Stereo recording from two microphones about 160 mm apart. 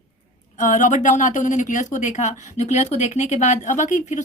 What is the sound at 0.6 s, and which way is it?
A woman's voice, 50° left (ahead or behind).